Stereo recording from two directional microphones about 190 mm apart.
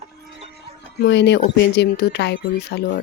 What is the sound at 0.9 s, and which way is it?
Speech, 60° left (ahead or behind).